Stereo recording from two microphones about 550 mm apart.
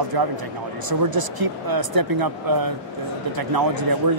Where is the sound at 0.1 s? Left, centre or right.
Right.